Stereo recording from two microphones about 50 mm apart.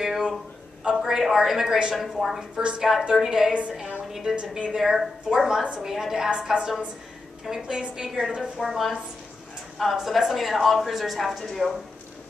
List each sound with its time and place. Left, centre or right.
0.0 s a sound: centre
0.8 s a woman's voice: centre
2.5 s a woman's voice: right
2.8 s a woman's voice: centre
4.4 s a woman's voice: right
4.7 s a woman's voice: centre
5.6 s a woman's voice: centre
5.9 s a woman's voice: centre
9.9 s a woman's voice: centre